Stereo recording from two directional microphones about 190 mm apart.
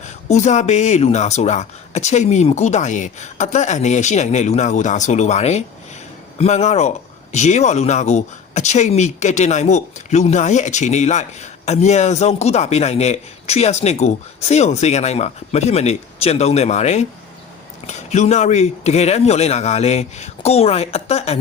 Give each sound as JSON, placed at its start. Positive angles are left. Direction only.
{"t": 0.0, "sound": "speech", "side_deg": 40}